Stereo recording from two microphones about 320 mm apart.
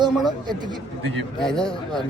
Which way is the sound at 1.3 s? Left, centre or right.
Centre.